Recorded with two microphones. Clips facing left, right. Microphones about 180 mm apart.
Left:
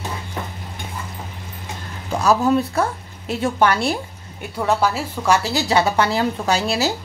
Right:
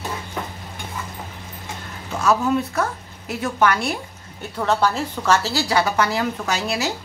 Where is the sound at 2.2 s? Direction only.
30° left (ahead or behind).